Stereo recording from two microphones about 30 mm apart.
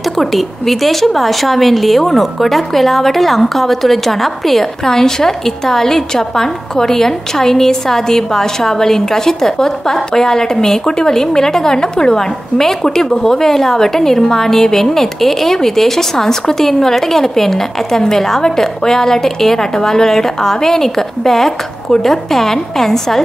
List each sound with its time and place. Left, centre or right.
0.2 s speech: centre
4.8 s a woman's voice: centre